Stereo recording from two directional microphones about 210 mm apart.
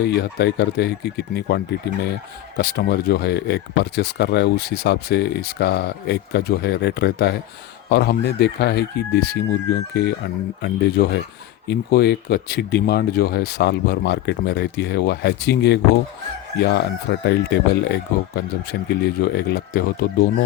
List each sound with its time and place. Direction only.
0.0 s speech: 50° left (ahead or behind)